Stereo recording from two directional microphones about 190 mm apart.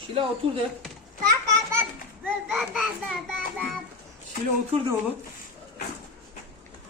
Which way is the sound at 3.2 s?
Centre (ahead or behind).